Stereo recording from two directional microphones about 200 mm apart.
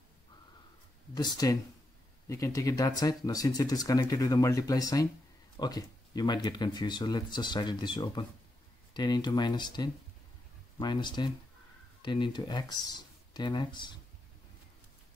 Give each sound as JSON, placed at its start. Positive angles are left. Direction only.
{"t": 1.1, "sound": "speech", "side_deg": 20}